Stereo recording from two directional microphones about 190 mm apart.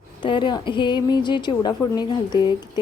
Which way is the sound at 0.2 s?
25° left (ahead or behind).